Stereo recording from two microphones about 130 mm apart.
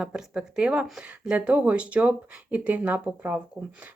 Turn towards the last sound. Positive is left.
turn(degrees=-10)  # may be behind; listen again after turning